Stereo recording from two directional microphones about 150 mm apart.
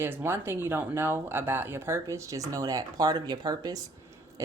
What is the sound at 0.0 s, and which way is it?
Speech, 15° right (ahead or behind).